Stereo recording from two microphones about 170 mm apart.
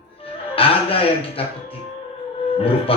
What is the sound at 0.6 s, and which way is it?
Speech, 35° left (ahead or behind).